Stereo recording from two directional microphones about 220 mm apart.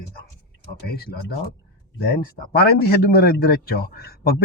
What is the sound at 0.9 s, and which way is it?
Speech, 45° left (ahead or behind).